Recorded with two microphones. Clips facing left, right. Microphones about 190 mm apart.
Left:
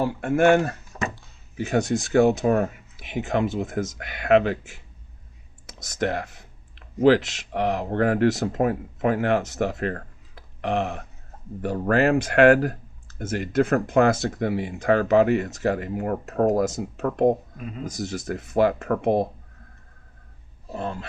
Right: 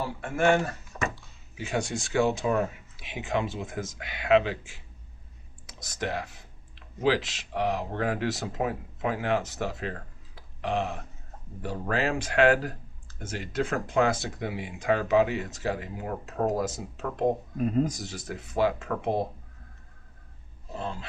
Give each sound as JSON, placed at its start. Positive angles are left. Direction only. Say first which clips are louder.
{"t": 0.0, "sound": "speech", "louder": "left 6 dB", "side_deg": 60}
{"t": 0.5, "sound": "speech", "louder": "left 6 dB", "side_deg": 55}
{"t": 2.2, "sound": "speech", "louder": "left 6 dB", "side_deg": 50}
{"t": 17.6, "sound": "speech", "louder": "right 10 dB", "side_deg": -40}
{"t": 17.8, "sound": "speech", "louder": "left 5 dB", "side_deg": 45}
{"t": 20.7, "sound": "speech", "louder": "left 5 dB", "side_deg": 55}